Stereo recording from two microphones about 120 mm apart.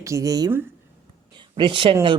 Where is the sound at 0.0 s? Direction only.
25° right (ahead or behind).